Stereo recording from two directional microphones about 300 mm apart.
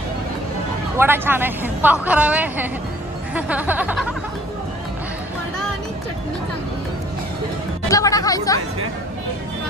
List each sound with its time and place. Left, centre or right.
0.9 s a woman's voice: centre
3.3 s music: centre
7.9 s speech: centre